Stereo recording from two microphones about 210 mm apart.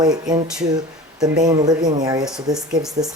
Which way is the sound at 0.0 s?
20° right (ahead or behind).